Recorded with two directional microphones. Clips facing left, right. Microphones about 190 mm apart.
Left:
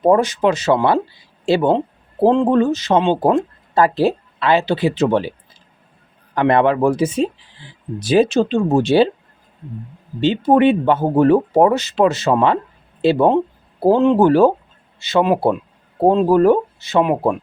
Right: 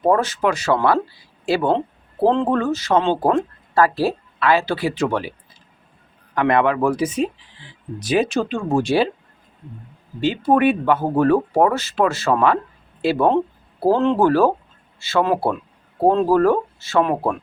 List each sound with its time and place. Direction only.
0.0 s speech: 15° left (ahead or behind)
6.3 s speech: 30° left (ahead or behind)
10.2 s speech: 25° left (ahead or behind)